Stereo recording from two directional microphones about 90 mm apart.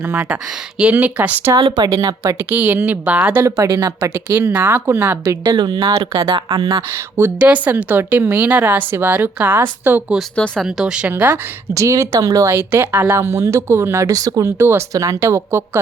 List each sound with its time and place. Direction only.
0.0 s speech: 15° right (ahead or behind)
2.0 s speech: 35° right (ahead or behind)
2.5 s a woman's voice: 20° right (ahead or behind)
3.8 s speech: 35° right (ahead or behind)
4.3 s a woman's voice: 25° right (ahead or behind)
5.2 s a woman's voice: 40° right (ahead or behind)
6.0 s speech: 65° right (ahead or behind)
6.9 s a woman's voice: 20° right (ahead or behind)
10.3 s speech: 10° left (ahead or behind)
10.6 s a woman's voice: 5° right (ahead or behind)
11.7 s speech: 35° right (ahead or behind)
14.6 s a woman's voice: 25° right (ahead or behind)
14.9 s speech: 40° right (ahead or behind)